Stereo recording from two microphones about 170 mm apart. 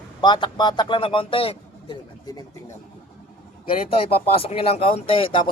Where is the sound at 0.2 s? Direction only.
25° left (ahead or behind).